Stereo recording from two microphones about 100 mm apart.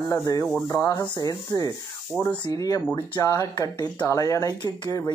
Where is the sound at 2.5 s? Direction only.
40° left (ahead or behind).